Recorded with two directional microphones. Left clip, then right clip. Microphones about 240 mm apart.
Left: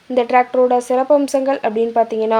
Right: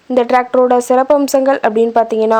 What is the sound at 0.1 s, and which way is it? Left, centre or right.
Speech, centre.